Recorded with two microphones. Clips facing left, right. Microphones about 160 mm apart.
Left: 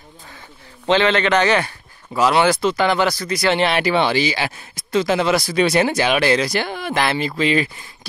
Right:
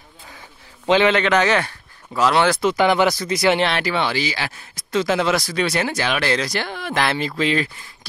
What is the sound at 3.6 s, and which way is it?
Speech, 15° left (ahead or behind).